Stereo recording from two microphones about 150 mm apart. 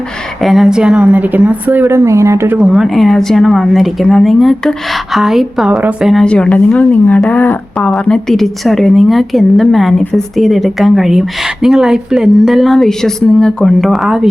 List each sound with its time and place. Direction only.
0.4 s a woman's voice: centre (ahead or behind); by 2.6 s 20° right (ahead or behind)
2.6 s a woman's voice: centre (ahead or behind)